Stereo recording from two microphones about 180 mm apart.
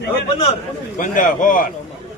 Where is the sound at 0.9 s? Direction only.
45° left (ahead or behind).